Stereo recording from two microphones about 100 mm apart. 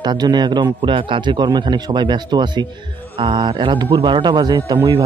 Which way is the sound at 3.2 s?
60° right (ahead or behind).